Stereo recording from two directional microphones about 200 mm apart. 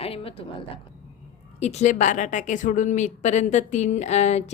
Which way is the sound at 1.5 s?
35° left (ahead or behind).